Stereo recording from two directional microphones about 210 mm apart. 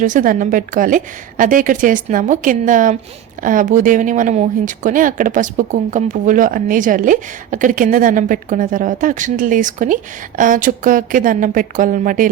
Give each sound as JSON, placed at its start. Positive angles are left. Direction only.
{"t": 0.0, "sound": "speech", "side_deg": -40}